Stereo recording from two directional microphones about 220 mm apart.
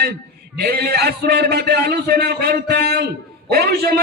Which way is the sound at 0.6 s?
45° right (ahead or behind).